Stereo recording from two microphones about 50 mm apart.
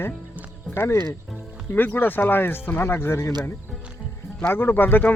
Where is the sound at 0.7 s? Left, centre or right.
Left.